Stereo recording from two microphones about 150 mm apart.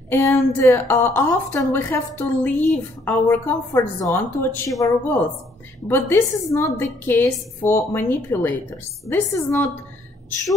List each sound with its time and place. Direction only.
0.1 s a woman's voice: 15° left (ahead or behind)